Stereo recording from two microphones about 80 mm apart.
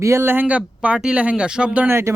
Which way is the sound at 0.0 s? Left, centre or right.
Right.